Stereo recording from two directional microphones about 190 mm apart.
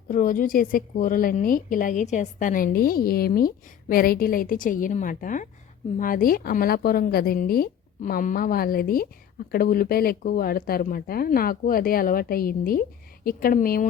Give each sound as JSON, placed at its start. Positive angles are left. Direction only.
{"t": 0.1, "sound": "a woman's voice", "side_deg": 45}